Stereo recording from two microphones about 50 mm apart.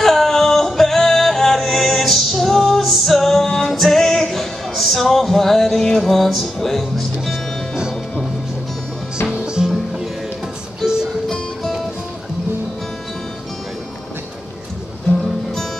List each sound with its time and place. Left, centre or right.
0.0 s music: centre
9.3 s music: centre
10.8 s music: centre